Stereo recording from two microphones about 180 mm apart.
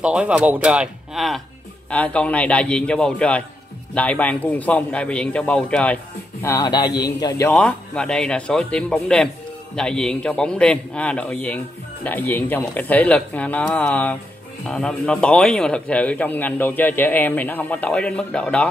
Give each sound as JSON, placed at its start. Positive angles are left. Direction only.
{"t": 0.0, "sound": "a man's voice", "side_deg": -5}
{"t": 6.4, "sound": "speech", "side_deg": 20}
{"t": 7.5, "sound": "a man's voice", "side_deg": 5}